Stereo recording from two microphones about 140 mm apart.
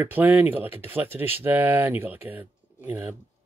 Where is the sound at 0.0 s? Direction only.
15° right (ahead or behind).